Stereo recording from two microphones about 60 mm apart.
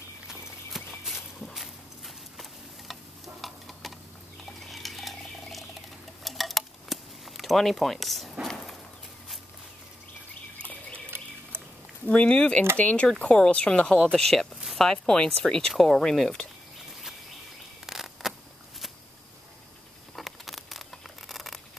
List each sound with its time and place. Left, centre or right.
0.3 s clip-clop: centre
1.5 s horse: centre
2.9 s stir: centre
4.5 s a sound: centre
11.1 s bird: right
12.1 s speech: centre
15.7 s speech: centre
17.8 s a sound: centre
20.2 s a sound: centre